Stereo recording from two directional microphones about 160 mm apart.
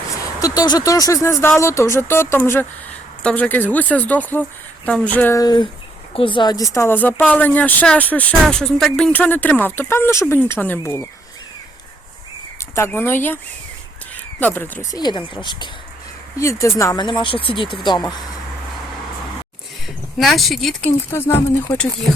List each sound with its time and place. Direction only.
0.4 s speech: 25° left (ahead or behind)
5.4 s speech: 25° left (ahead or behind)
12.5 s speech: 15° left (ahead or behind)
16.4 s speech: 15° left (ahead or behind)
20.1 s speech: centre (ahead or behind)
21.1 s speech: 15° left (ahead or behind)